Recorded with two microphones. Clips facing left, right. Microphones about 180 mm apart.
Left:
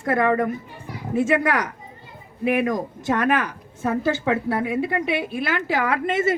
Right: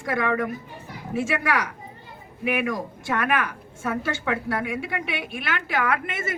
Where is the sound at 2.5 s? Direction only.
35° left (ahead or behind).